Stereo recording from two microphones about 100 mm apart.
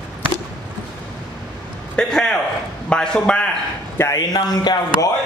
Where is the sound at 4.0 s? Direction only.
35° left (ahead or behind).